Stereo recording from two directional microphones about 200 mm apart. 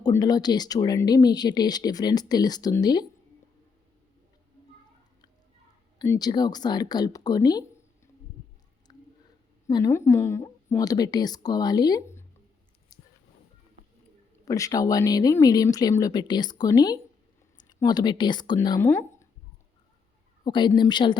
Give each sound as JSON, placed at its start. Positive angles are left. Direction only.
{"t": 0.0, "sound": "speech", "side_deg": 20}
{"t": 6.0, "sound": "speech", "side_deg": 20}
{"t": 9.6, "sound": "a woman's voice", "side_deg": 15}
{"t": 12.9, "sound": "a sound", "side_deg": 15}
{"t": 14.4, "sound": "a woman's voice", "side_deg": 15}
{"t": 20.4, "sound": "speech", "side_deg": 20}